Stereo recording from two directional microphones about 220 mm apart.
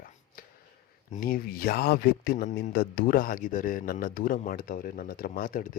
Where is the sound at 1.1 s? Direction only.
40° left (ahead or behind).